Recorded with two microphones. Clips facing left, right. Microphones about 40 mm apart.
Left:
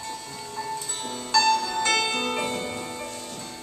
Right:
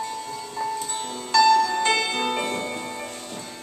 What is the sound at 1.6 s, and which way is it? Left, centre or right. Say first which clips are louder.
Music: right 2 dB; right.